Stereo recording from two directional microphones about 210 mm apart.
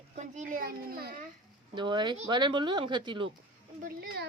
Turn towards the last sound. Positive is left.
turn(degrees=-50)  # may be behind; listen again after turning